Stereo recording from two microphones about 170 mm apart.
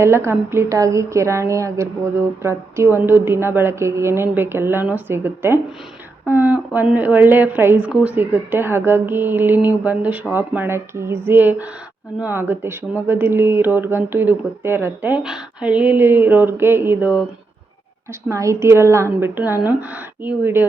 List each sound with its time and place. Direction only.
0.0 s speech: 15° right (ahead or behind)
18.3 s speech: 20° right (ahead or behind)